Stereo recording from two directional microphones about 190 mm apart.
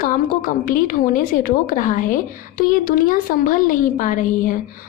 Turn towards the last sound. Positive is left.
turn(degrees=45)  # may be behind; listen again after turning